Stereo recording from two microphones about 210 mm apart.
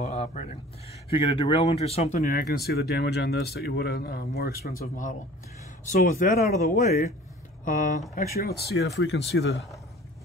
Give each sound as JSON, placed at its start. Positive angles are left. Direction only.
{"t": 0.0, "sound": "speech", "side_deg": 35}
{"t": 2.2, "sound": "speech", "side_deg": 45}
{"t": 8.4, "sound": "speech", "side_deg": 50}
{"t": 8.7, "sound": "speech", "side_deg": 60}